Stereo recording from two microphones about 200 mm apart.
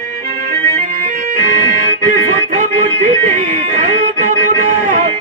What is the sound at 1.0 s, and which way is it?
Music, 40° right (ahead or behind).